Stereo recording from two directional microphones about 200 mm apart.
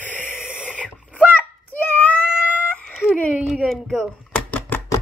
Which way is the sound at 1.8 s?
5° left (ahead or behind).